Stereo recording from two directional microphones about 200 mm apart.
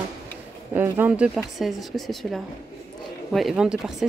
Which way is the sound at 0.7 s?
10° right (ahead or behind).